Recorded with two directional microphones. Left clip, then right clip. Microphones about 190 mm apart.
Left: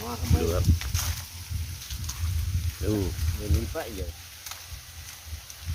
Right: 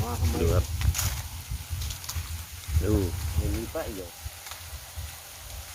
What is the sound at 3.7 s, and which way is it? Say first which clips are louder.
Speech: right 1 dB; 60° left (ahead or behind).